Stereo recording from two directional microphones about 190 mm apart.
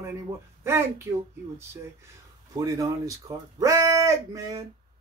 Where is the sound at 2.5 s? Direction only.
15° right (ahead or behind).